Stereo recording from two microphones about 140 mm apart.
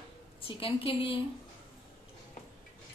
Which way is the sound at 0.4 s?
40° left (ahead or behind).